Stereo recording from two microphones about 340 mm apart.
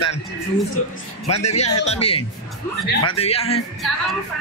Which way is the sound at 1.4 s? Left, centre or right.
Centre.